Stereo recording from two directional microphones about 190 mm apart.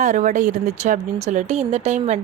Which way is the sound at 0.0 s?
40° right (ahead or behind).